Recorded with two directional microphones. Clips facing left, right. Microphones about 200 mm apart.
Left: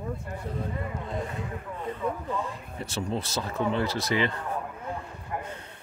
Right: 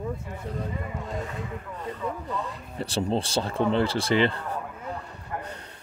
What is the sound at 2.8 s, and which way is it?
Speech, 30° right (ahead or behind).